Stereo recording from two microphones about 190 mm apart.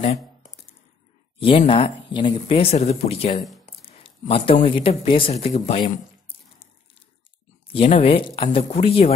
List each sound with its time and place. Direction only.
0.0 s computer keyboard: 35° left (ahead or behind)
1.7 s speech: 25° left (ahead or behind)
3.9 s a sound: 30° left (ahead or behind)
4.6 s speech: 30° left (ahead or behind)